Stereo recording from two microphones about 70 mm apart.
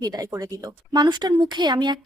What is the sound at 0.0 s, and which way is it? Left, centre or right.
A woman's voice, right.